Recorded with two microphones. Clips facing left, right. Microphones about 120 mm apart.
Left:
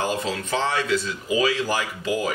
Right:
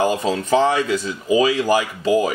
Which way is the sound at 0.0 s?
15° right (ahead or behind).